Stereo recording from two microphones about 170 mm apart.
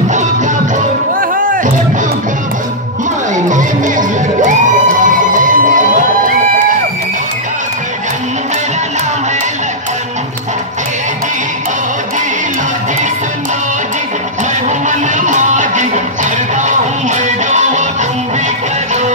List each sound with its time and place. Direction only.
1.3 s music: 50° right (ahead or behind)
3.3 s music: 45° right (ahead or behind)
5.0 s a sound: 50° right (ahead or behind)
14.9 s music: 45° right (ahead or behind)
17.5 s music: 45° right (ahead or behind)